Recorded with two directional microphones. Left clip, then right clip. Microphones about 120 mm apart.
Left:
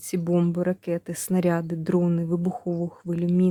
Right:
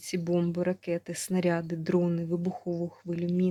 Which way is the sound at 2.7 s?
60° left (ahead or behind).